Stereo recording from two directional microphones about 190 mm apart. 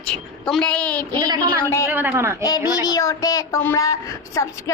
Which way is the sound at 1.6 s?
15° left (ahead or behind).